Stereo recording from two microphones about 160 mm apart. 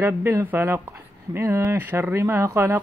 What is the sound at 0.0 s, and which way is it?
Speech, 15° right (ahead or behind).